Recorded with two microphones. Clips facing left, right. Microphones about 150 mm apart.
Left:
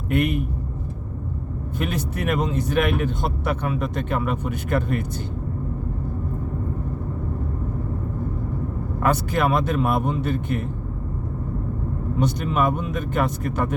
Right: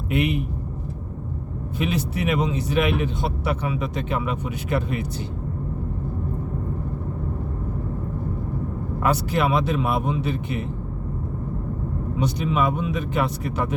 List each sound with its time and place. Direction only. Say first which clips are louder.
0.1 s speech: left 1 dB; 50° left (ahead or behind)
1.8 s speech: right 2 dB; 50° left (ahead or behind)
9.0 s speech: left 1 dB; 50° left (ahead or behind)
12.2 s speech: left 1 dB; 50° left (ahead or behind)